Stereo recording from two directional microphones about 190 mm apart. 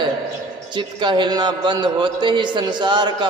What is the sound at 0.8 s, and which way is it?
A man's voice, 25° right (ahead or behind).